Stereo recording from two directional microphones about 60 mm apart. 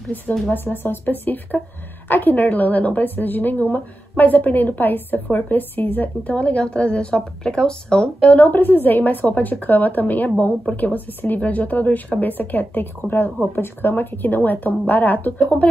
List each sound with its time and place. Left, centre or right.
0.5 s a woman's voice: left